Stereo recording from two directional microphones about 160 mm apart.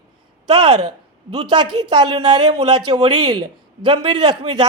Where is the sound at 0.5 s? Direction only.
25° right (ahead or behind).